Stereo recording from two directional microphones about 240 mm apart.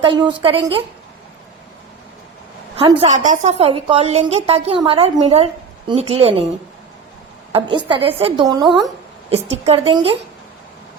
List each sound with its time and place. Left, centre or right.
0.0 s a woman's voice: centre
2.7 s a woman's voice: right
7.5 s a woman's voice: right